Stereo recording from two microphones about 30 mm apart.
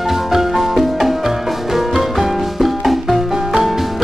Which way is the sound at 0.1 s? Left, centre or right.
Centre.